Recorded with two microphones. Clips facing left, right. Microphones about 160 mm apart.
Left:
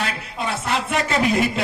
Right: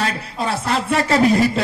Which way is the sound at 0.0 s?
35° right (ahead or behind).